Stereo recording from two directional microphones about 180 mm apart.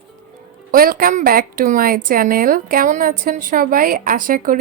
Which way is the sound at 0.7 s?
55° right (ahead or behind).